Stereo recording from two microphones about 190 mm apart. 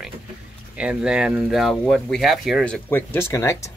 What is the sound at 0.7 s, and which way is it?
Speech, 5° right (ahead or behind).